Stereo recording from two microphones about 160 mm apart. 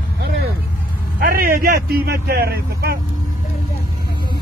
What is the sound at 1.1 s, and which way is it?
Speech, 65° right (ahead or behind).